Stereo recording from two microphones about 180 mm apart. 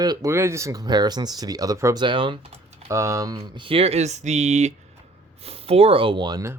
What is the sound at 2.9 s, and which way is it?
Speech, 15° right (ahead or behind).